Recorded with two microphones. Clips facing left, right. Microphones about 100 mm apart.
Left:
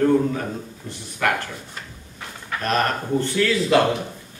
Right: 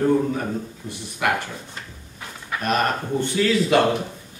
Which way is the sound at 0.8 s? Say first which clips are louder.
Right 1 dB; 20° right (ahead or behind).